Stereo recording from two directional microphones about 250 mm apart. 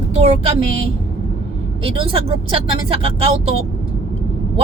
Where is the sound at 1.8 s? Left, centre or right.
Right.